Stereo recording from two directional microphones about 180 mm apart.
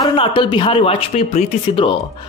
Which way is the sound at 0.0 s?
25° left (ahead or behind).